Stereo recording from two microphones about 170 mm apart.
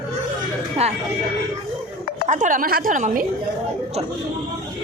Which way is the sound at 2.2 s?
45° right (ahead or behind).